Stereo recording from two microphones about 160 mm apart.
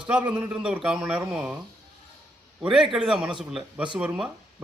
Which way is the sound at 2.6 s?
5° right (ahead or behind).